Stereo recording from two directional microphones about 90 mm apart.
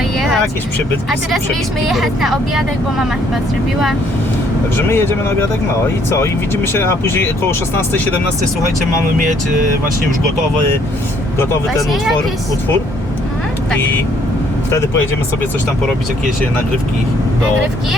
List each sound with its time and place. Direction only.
1.9 s speech: centre (ahead or behind)
4.9 s speech: 25° left (ahead or behind)